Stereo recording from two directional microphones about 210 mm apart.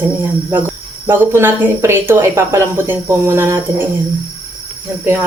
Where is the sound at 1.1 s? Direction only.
10° right (ahead or behind).